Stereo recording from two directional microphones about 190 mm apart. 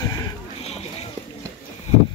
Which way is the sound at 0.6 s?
35° left (ahead or behind).